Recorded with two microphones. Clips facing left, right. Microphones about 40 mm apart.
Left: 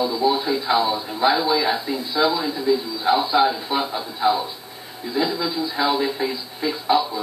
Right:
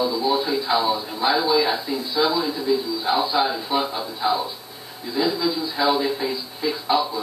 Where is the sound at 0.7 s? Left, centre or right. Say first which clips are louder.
Left 1 dB; centre.